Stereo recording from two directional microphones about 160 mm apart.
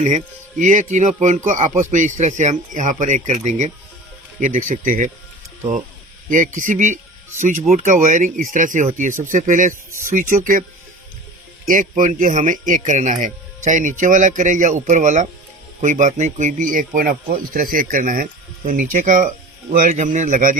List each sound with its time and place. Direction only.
0.6 s speech: 50° right (ahead or behind)
6.2 s speech: 55° right (ahead or behind)
11.7 s speech: 55° right (ahead or behind)